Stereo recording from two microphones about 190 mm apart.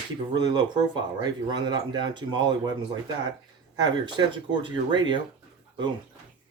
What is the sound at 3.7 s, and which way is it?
Speech, 20° right (ahead or behind).